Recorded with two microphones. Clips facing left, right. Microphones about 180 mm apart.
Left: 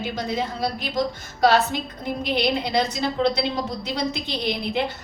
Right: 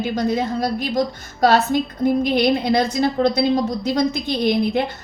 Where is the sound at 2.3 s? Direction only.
50° right (ahead or behind).